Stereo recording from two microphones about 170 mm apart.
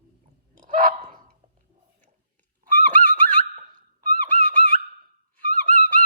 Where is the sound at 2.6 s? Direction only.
50° right (ahead or behind).